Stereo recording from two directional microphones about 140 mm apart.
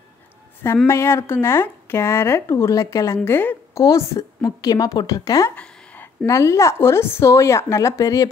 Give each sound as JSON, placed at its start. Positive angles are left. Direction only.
{"t": 0.8, "sound": "a woman's voice", "side_deg": 20}